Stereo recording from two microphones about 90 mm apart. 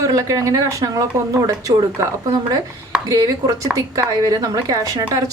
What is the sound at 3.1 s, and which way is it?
A woman's voice, 40° right (ahead or behind).